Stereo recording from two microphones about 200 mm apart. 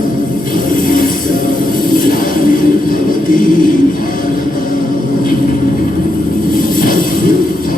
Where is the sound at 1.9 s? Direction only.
45° left (ahead or behind).